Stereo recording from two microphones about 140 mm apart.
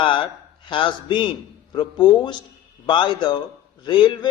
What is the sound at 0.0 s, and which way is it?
A man's voice, 35° left (ahead or behind).